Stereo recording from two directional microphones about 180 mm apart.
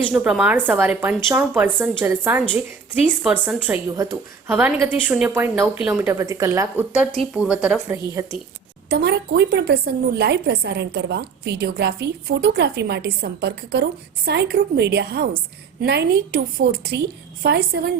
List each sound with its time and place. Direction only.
0.1 s a woman's voice: 5° right (ahead or behind)
7.2 s a woman's voice: 5° right (ahead or behind)
8.2 s a woman's voice: 15° right (ahead or behind)
8.9 s a woman's voice: 65° right (ahead or behind)